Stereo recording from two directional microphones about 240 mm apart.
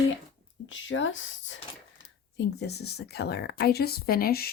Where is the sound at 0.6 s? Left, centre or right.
Left.